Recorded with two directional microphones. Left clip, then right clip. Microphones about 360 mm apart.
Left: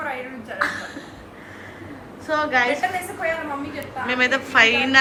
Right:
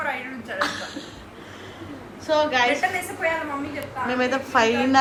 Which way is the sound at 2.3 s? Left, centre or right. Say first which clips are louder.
Even; centre.